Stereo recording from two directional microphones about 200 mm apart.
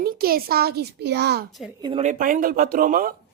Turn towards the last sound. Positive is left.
turn(degrees=-45)  # may be behind; listen again after turning